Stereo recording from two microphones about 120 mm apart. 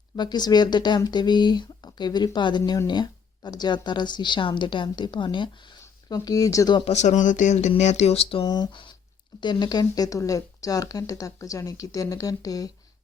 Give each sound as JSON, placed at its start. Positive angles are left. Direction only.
{"t": 0.2, "sound": "speech", "side_deg": 35}
{"t": 6.8, "sound": "speech", "side_deg": 65}
{"t": 7.8, "sound": "speech", "side_deg": 70}
{"t": 8.4, "sound": "speech", "side_deg": 35}